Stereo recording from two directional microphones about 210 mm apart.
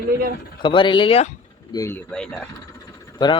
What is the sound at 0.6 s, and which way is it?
Speech, 20° left (ahead or behind).